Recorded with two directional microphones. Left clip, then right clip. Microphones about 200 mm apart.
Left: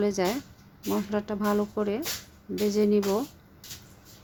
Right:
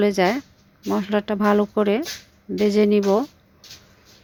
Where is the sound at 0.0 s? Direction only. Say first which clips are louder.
Right 8 dB; 30° right (ahead or behind).